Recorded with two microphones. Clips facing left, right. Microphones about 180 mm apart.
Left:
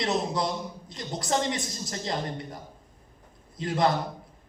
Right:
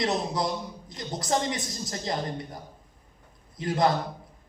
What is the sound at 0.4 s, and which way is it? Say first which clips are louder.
Speech: even; 20° left (ahead or behind).